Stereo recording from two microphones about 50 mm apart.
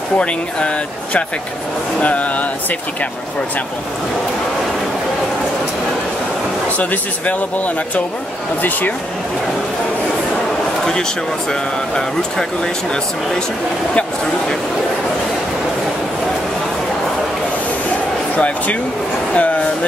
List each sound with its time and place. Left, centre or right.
0.2 s speech: left
6.8 s speech: left
11.9 s speech: centre
18.3 s speech: left
19.3 s vehicle: left